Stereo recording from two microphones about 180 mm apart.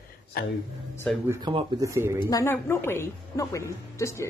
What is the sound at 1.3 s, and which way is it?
Speech, 25° right (ahead or behind).